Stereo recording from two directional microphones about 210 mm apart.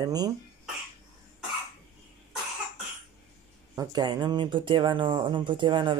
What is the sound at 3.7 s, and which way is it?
Speech, 20° right (ahead or behind).